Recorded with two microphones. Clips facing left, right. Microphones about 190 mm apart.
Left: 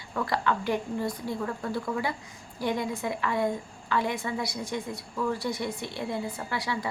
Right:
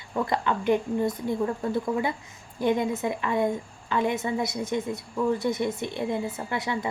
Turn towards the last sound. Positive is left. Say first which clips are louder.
# right 3 dB
turn(degrees=-20)  # may be behind; listen again after turning